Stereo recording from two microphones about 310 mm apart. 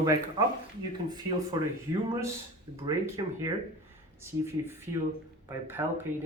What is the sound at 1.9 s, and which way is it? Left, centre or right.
Speech, centre.